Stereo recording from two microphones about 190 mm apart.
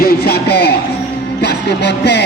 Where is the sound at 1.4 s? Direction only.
60° left (ahead or behind).